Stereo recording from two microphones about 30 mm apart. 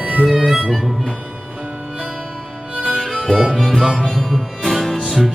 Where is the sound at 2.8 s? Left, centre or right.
Centre.